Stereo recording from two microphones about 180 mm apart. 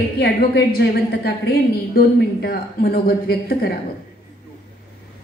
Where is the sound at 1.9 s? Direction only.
60° left (ahead or behind).